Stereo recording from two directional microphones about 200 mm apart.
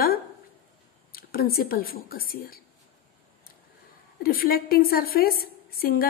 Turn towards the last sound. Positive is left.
turn(degrees=45)  # may be behind; listen again after turning